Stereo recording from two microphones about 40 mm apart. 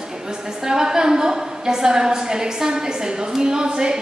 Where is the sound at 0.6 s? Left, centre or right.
Centre.